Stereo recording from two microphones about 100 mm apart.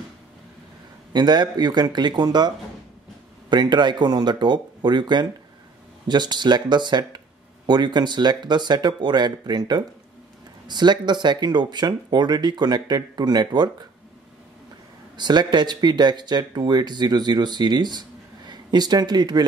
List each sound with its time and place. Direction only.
1.1 s speech: 45° right (ahead or behind)
15.1 s speech: 45° right (ahead or behind)